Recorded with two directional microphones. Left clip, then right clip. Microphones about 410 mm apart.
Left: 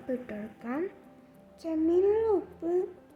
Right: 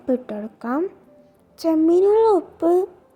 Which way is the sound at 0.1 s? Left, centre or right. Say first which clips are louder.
Right 12 dB; centre.